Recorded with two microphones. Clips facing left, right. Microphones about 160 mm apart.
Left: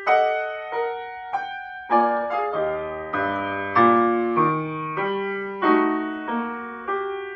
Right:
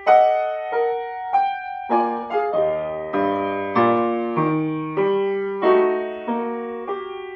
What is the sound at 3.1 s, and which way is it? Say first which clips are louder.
Music: right 6 dB; 30° right (ahead or behind).